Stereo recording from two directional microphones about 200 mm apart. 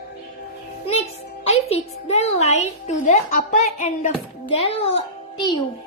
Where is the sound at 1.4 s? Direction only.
30° left (ahead or behind).